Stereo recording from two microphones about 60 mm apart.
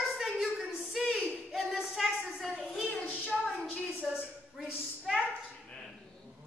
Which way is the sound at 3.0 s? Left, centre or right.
Left.